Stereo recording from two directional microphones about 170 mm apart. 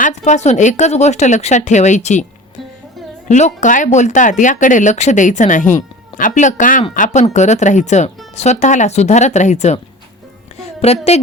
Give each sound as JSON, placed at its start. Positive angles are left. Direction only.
{"t": 0.0, "sound": "speech", "side_deg": 45}
{"t": 3.2, "sound": "a woman's voice", "side_deg": 45}